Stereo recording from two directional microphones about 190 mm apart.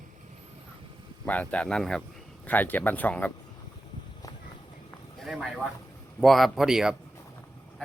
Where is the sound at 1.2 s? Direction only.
5° left (ahead or behind).